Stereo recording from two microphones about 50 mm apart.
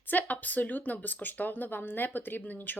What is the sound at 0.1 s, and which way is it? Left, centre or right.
Speech, left.